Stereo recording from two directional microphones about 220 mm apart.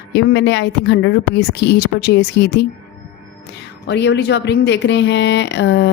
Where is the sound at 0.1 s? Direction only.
50° left (ahead or behind).